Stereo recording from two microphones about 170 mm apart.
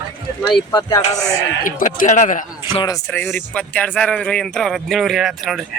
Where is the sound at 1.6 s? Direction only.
55° left (ahead or behind).